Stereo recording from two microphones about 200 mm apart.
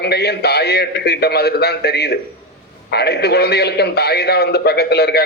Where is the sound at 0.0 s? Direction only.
55° left (ahead or behind).